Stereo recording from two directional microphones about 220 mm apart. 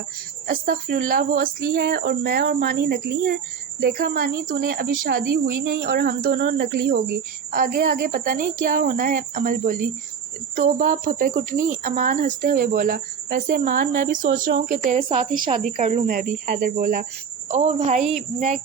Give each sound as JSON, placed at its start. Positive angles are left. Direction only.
{"t": 0.4, "sound": "speech", "side_deg": -40}
{"t": 17.5, "sound": "speech", "side_deg": -30}